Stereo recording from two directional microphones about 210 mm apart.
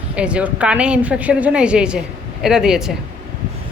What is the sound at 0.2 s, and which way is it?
A woman's voice, 5° right (ahead or behind).